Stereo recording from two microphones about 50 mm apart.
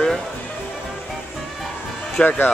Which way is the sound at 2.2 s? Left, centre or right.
Left.